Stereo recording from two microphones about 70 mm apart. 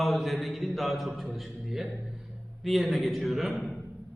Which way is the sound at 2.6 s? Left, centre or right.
Centre.